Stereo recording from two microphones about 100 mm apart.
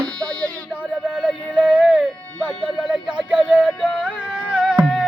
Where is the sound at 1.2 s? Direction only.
10° right (ahead or behind).